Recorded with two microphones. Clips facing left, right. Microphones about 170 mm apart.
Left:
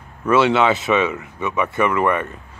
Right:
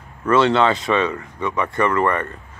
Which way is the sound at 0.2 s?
5° left (ahead or behind).